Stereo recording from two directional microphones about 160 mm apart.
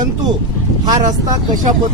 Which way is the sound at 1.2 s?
20° right (ahead or behind).